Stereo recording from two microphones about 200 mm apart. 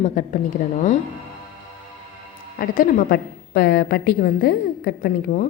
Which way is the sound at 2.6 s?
45° left (ahead or behind).